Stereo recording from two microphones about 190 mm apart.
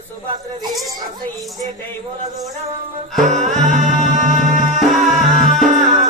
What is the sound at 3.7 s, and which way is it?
Music, 40° right (ahead or behind).